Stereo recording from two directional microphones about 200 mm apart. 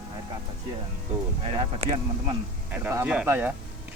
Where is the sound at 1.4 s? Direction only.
30° right (ahead or behind).